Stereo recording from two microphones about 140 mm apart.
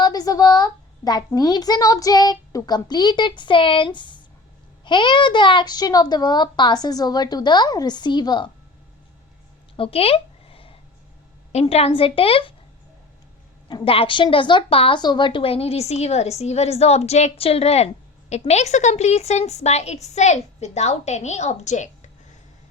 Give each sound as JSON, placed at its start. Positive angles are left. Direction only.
{"t": 0.0, "sound": "a child's voice", "side_deg": 25}
{"t": 9.7, "sound": "a sound", "side_deg": 40}
{"t": 11.7, "sound": "speech", "side_deg": 45}
{"t": 13.7, "sound": "a woman's voice", "side_deg": 40}